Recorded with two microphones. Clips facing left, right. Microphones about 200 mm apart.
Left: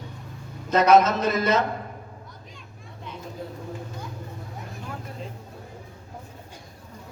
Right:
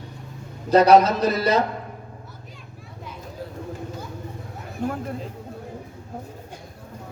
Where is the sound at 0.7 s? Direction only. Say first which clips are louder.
Right 3 dB; 35° right (ahead or behind).